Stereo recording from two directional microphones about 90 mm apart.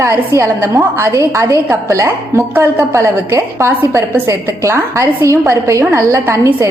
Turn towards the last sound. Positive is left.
turn(degrees=-35)  # may be behind; listen again after turning